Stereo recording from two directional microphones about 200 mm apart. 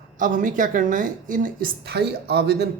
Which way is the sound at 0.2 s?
40° right (ahead or behind).